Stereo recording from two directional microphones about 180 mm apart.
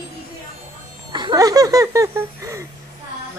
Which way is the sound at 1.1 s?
25° right (ahead or behind).